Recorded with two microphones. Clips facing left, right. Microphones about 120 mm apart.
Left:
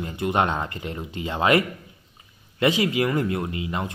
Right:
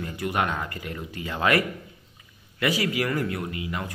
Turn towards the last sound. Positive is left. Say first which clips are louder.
# left 3 dB
turn(degrees=25)  # may be behind; listen again after turning